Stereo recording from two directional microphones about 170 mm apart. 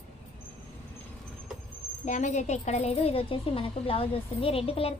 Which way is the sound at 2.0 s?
45° left (ahead or behind).